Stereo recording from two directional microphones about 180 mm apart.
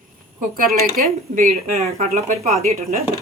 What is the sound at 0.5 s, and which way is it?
Speech, 55° right (ahead or behind).